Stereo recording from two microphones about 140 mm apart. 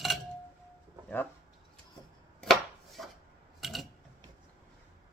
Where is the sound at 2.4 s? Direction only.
Centre (ahead or behind).